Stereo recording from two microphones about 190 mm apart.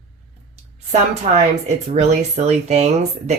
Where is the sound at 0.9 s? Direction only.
35° right (ahead or behind).